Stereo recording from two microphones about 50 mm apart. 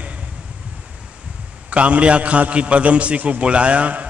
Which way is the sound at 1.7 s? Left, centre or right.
Right.